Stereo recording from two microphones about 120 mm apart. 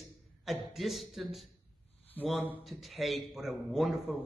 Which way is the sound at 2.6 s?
Centre (ahead or behind).